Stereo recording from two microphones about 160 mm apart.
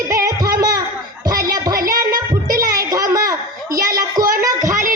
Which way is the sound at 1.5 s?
20° right (ahead or behind).